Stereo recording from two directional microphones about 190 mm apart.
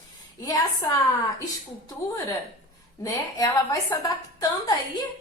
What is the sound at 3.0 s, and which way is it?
A woman's voice, 15° left (ahead or behind).